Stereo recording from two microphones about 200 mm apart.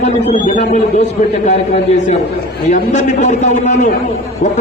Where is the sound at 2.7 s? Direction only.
35° left (ahead or behind).